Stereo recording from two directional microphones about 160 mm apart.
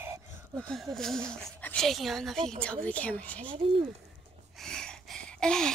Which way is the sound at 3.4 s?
35° right (ahead or behind).